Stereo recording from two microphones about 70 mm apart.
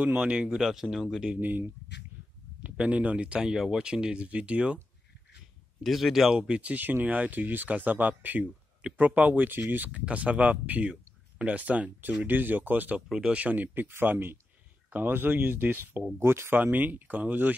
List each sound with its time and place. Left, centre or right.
0.0 s speech: centre
0.6 s speech: centre
1.4 s speech: right
5.9 s speech: centre; by 17.6 s right